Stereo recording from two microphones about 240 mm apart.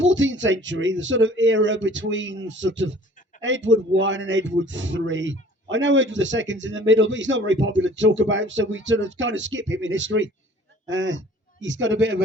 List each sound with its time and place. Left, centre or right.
0.0 s a man's voice: right